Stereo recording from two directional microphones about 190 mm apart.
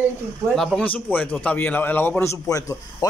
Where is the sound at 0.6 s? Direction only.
5° left (ahead or behind).